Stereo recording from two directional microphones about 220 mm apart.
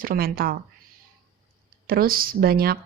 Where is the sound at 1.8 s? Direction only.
40° right (ahead or behind).